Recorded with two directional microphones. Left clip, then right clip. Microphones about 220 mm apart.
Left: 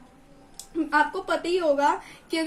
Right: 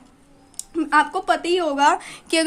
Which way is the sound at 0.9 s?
45° right (ahead or behind).